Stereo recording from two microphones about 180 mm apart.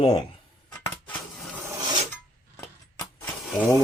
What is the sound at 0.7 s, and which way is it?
Dishes, 10° left (ahead or behind).